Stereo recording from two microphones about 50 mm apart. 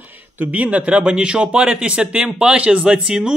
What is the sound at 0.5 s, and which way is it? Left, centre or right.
Speech, right.